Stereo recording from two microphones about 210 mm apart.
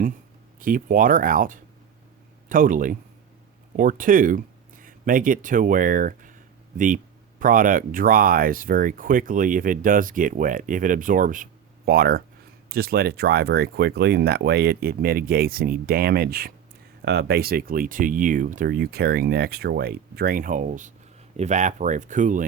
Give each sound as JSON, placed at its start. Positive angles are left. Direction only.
{"t": 0.6, "sound": "speech", "side_deg": -40}